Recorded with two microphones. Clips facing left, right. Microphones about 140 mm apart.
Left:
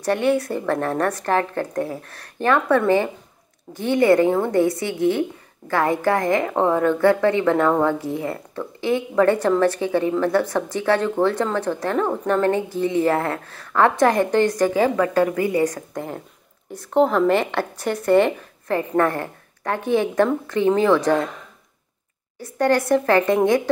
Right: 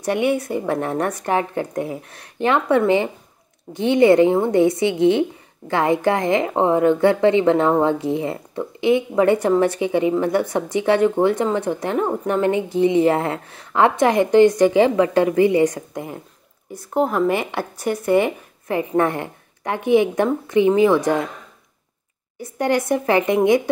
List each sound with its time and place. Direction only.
0.0 s a woman's voice: 15° right (ahead or behind)
22.4 s a woman's voice: 15° right (ahead or behind)